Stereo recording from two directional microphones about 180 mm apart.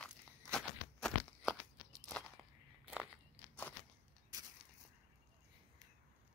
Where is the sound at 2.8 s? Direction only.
5° right (ahead or behind).